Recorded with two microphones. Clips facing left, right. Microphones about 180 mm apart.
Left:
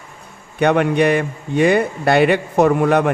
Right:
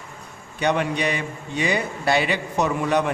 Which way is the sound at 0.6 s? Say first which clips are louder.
Left 8 dB; 55° left (ahead or behind).